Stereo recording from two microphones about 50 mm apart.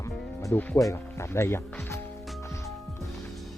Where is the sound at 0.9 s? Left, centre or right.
Left.